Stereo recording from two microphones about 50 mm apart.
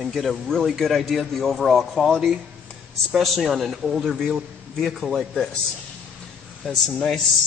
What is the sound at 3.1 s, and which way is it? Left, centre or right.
Speech, centre.